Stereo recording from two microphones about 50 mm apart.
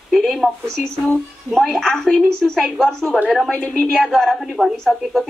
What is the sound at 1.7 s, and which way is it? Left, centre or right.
A woman's voice, centre.